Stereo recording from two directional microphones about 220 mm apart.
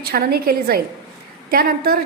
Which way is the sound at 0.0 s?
45° right (ahead or behind).